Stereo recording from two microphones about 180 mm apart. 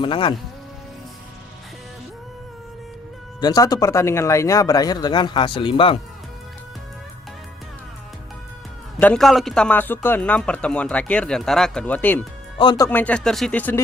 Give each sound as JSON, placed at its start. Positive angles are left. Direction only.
{"t": 0.0, "sound": "speech", "side_deg": 25}
{"t": 3.4, "sound": "speech", "side_deg": 20}
{"t": 9.0, "sound": "a man's voice", "side_deg": 5}
{"t": 12.5, "sound": "a man's voice", "side_deg": 25}